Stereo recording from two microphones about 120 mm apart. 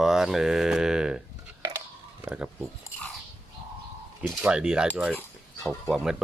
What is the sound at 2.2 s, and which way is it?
Speech, 10° right (ahead or behind).